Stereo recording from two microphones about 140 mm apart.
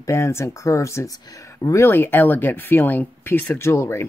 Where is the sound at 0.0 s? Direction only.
20° left (ahead or behind).